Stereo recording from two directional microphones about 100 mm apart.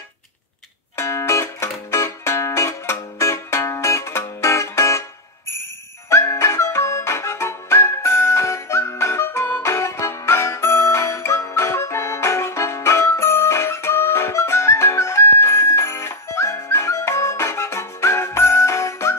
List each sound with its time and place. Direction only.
0.9 s music: 30° left (ahead or behind)
6.0 s music: 25° left (ahead or behind)